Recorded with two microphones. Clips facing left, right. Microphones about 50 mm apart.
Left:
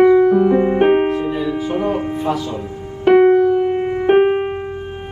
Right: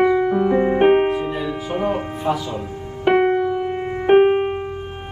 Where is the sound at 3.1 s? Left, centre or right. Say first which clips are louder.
Left 6 dB; centre.